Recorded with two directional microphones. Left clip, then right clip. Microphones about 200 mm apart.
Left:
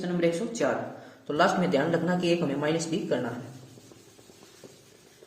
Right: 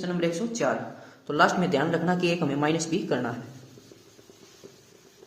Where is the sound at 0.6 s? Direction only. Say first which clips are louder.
Right 1 dB; 25° right (ahead or behind).